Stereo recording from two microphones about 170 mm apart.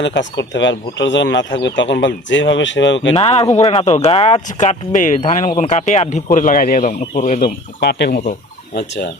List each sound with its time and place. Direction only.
0.0 s speech: 90° left
3.1 s speech: 35° left (ahead or behind)
7.4 s speech: 75° left (ahead or behind)